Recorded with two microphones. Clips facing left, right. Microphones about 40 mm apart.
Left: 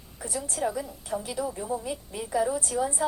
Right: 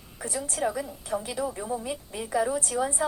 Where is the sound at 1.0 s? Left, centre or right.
Right.